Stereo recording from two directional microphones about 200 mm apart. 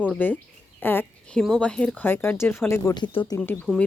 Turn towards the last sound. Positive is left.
turn(degrees=10)  # may be behind; listen again after turning